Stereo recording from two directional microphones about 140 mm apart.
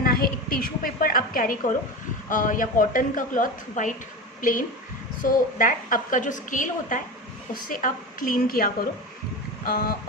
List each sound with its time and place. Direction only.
0.0 s a woman's voice: 90° left